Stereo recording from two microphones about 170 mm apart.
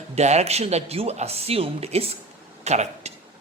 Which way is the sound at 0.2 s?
40° right (ahead or behind).